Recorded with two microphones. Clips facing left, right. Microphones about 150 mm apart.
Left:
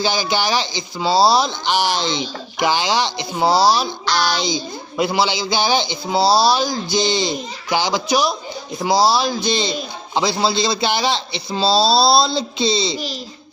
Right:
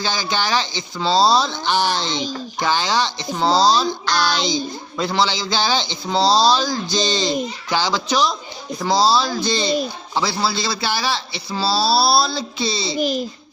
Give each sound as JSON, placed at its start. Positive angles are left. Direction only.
{"t": 0.0, "sound": "speech", "side_deg": 15}
{"t": 13.0, "sound": "speech", "side_deg": -50}